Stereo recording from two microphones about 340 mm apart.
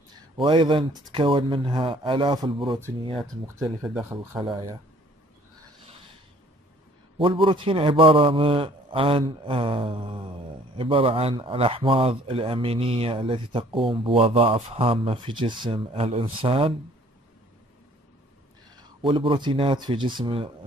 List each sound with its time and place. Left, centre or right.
0.4 s speech: centre
3.2 s speech: centre
7.2 s speech: centre
18.8 s speech: centre